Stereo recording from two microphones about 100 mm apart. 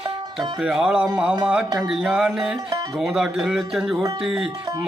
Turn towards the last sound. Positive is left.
turn(degrees=-5)  # may be behind; listen again after turning